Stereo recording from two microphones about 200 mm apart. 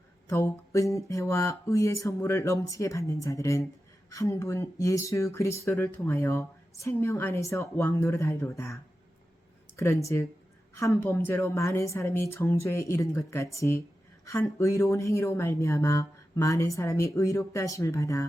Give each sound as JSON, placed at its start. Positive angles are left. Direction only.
{"t": 0.3, "sound": "speech", "side_deg": 15}